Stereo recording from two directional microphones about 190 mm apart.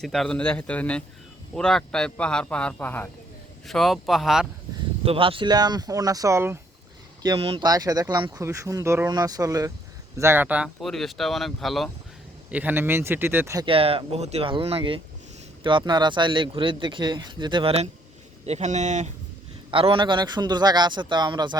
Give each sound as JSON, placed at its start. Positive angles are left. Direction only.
{"t": 0.0, "sound": "speech", "side_deg": 0}
{"t": 5.0, "sound": "speech", "side_deg": -30}
{"t": 13.7, "sound": "speech", "side_deg": -30}
{"t": 19.7, "sound": "speech", "side_deg": -30}